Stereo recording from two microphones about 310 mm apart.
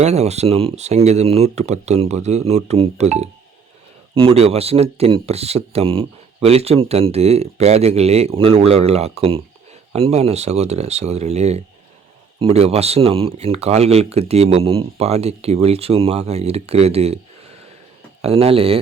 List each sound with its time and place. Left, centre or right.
0.0 s speech: right
18.2 s speech: centre